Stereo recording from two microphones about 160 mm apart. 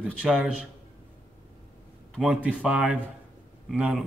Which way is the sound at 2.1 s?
5° right (ahead or behind).